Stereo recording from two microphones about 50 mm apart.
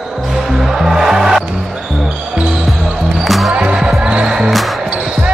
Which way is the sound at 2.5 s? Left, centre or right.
Centre.